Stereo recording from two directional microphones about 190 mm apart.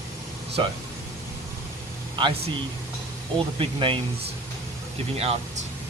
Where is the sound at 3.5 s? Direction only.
25° right (ahead or behind).